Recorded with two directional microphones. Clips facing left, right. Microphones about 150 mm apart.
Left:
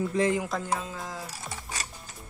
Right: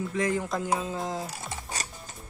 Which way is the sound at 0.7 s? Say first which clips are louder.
Right 5 dB; 25° right (ahead or behind).